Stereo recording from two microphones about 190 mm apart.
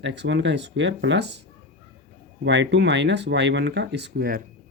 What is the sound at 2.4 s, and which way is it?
Speech, 65° right (ahead or behind).